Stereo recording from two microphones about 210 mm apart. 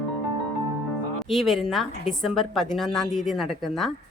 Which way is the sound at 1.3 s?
Centre (ahead or behind).